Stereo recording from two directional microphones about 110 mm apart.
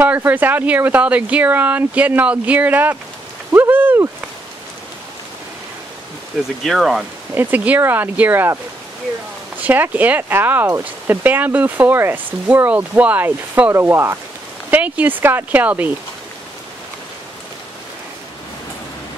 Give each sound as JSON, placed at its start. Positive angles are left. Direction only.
{"t": 0.0, "sound": "speech", "side_deg": -15}
{"t": 3.5, "sound": "a sound", "side_deg": -20}
{"t": 6.6, "sound": "speech", "side_deg": 0}
{"t": 7.3, "sound": "speech", "side_deg": -15}
{"t": 9.6, "sound": "speech", "side_deg": -15}